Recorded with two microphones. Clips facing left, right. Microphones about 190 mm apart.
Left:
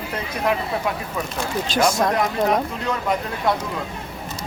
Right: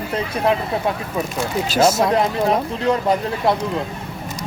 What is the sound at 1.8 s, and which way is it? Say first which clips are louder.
Speech: right 3 dB; 5° right (ahead or behind).